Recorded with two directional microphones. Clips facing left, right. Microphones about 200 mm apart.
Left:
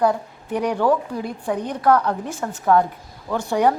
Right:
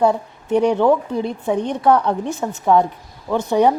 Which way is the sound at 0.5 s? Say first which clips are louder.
Right 5 dB; 25° right (ahead or behind).